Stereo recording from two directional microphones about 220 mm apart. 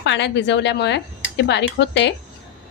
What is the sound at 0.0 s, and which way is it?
Speech, 55° left (ahead or behind).